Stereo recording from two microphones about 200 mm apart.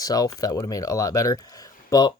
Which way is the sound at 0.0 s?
20° left (ahead or behind).